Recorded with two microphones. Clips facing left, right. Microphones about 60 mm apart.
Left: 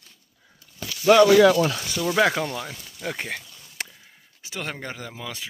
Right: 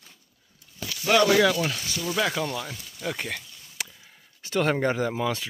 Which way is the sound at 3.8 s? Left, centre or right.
Left.